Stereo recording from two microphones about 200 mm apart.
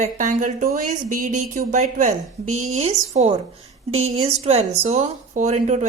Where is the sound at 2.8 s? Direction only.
30° right (ahead or behind).